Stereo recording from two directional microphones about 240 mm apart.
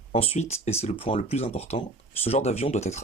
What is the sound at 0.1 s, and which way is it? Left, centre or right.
Speech, left.